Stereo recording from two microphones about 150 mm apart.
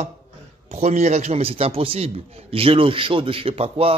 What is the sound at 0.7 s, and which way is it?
A man's voice, 45° right (ahead or behind).